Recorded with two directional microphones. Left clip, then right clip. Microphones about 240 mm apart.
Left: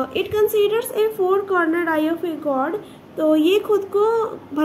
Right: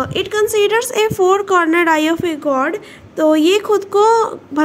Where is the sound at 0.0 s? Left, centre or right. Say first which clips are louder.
Right 3 dB; right.